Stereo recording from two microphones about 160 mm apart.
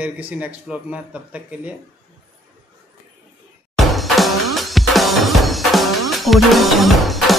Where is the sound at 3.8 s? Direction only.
Centre (ahead or behind).